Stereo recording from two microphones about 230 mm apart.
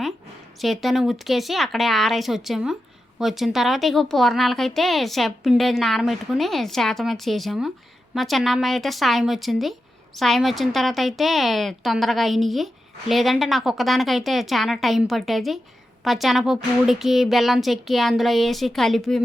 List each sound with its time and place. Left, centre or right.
0.6 s a woman's voice: centre